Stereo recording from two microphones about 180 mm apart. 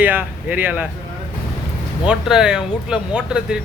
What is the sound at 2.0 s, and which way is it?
Speech, 5° right (ahead or behind).